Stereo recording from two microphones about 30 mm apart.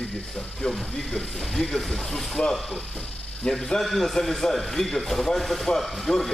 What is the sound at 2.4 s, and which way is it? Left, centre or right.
Speech, left.